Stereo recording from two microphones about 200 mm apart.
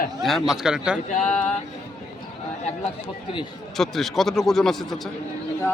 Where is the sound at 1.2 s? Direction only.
5° left (ahead or behind).